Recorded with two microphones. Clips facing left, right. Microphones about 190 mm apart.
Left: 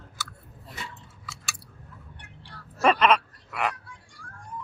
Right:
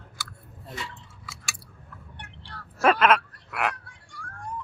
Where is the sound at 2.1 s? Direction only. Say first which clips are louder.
Right 3 dB; 70° right (ahead or behind).